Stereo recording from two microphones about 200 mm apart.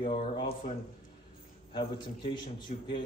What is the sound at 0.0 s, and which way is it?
Speech, 25° left (ahead or behind).